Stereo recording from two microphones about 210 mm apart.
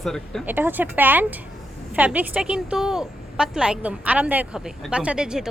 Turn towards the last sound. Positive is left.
turn(degrees=-5)  # may be behind; listen again after turning